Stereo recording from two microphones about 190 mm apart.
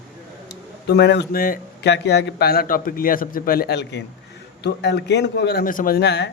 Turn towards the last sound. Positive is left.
turn(degrees=60)  # may be behind; listen again after turning